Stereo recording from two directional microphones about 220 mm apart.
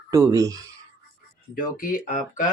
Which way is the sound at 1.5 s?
40° left (ahead or behind).